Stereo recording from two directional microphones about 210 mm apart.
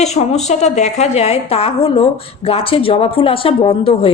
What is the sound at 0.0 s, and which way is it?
A woman's voice, 30° left (ahead or behind).